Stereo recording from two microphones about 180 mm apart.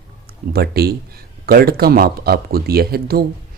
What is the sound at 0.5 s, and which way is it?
Speech, 60° right (ahead or behind).